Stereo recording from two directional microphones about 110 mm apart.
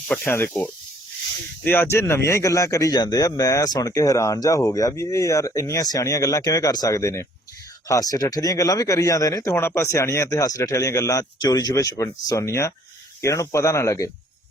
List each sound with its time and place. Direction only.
0.3 s speech: 20° left (ahead or behind)